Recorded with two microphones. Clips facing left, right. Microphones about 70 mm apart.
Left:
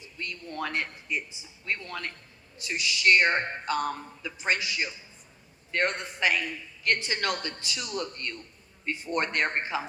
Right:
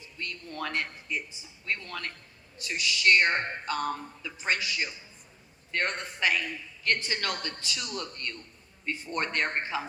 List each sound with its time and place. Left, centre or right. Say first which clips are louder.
0.2 s speech: left 2 dB; left
6.2 s speech: left 1 dB; left